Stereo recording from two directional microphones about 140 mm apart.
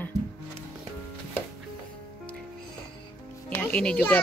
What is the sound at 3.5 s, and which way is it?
Music, 10° left (ahead or behind).